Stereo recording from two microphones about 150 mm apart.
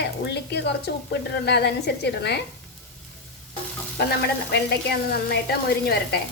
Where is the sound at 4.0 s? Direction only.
90° left.